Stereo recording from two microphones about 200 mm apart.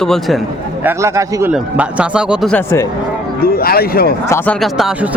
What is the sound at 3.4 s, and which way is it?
Speech, 50° left (ahead or behind).